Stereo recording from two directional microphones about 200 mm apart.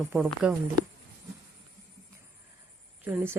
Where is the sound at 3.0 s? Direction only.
10° right (ahead or behind).